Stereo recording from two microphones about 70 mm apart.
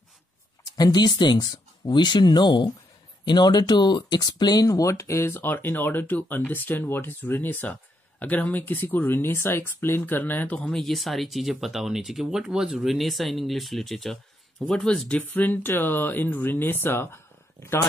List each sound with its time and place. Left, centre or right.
0.7 s speech: left; by 10.8 s centre
10.8 s speech: centre
15.0 s speech: left